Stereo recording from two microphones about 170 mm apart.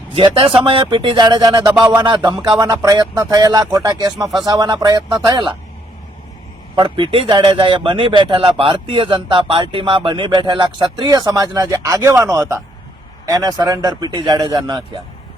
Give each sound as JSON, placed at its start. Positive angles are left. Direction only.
{"t": 0.1, "sound": "a man's voice", "side_deg": -30}
{"t": 1.6, "sound": "a sound", "side_deg": -10}
{"t": 2.0, "sound": "a man's voice", "side_deg": -30}
{"t": 6.7, "sound": "a man's voice", "side_deg": -30}